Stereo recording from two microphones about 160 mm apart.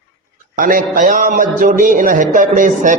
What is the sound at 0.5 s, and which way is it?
A man's voice, 55° right (ahead or behind).